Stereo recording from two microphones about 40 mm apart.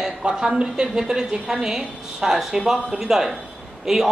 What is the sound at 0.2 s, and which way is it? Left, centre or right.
A woman's voice, right.